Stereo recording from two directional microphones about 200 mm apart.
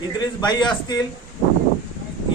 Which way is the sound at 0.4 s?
20° left (ahead or behind).